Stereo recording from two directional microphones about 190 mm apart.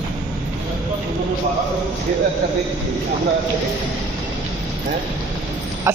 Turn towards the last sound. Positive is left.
turn(degrees=-15)  # may be behind; listen again after turning